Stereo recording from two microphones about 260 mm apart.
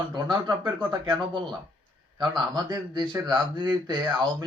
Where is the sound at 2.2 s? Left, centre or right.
Centre.